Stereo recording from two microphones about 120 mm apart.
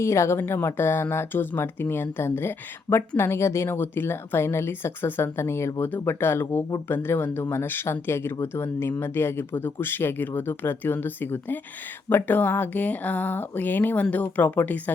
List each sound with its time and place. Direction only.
0.0 s speech: 20° left (ahead or behind)